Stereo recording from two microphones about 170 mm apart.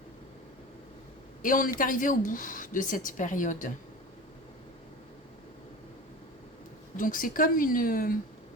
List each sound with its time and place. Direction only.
1.4 s a man's voice: 55° left (ahead or behind)
6.9 s a woman's voice: 55° left (ahead or behind)